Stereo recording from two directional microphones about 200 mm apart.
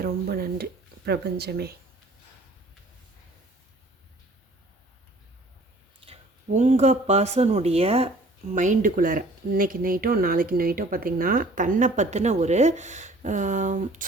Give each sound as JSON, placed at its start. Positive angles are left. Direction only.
{"t": 0.0, "sound": "speech", "side_deg": -50}
{"t": 6.0, "sound": "speech", "side_deg": -35}